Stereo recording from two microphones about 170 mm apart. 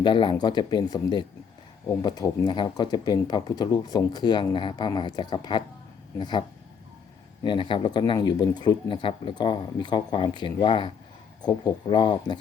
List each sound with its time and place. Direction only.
0.0 s speech: 30° left (ahead or behind)
7.4 s speech: 30° left (ahead or behind)